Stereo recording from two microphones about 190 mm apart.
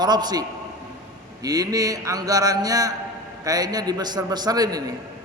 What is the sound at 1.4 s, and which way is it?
A man's voice, 20° right (ahead or behind).